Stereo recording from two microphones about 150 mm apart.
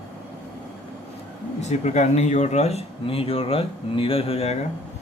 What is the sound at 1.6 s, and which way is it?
Speech, 50° left (ahead or behind).